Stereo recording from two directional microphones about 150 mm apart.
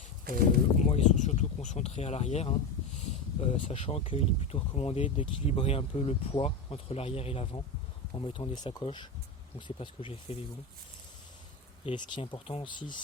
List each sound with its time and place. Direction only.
0.9 s speech: 50° left (ahead or behind)
11.9 s speech: 35° left (ahead or behind)